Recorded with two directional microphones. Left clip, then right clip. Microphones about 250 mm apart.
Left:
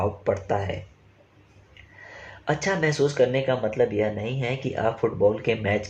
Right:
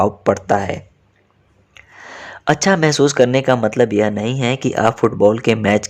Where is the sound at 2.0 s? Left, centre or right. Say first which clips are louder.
Right 10 dB; right.